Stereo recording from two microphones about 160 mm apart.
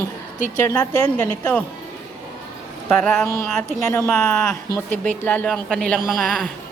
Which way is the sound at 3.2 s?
15° left (ahead or behind).